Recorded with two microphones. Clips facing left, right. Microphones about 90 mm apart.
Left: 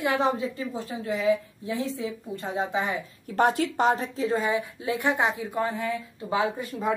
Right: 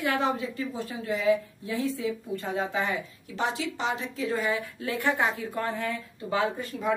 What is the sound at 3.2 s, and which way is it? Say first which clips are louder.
Speech: left 8 dB; 50° left (ahead or behind).